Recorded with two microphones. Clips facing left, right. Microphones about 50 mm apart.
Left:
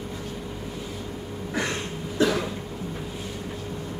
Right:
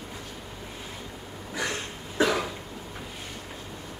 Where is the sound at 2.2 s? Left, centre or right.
Centre.